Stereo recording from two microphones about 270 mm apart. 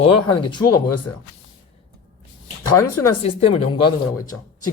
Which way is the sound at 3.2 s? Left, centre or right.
Left.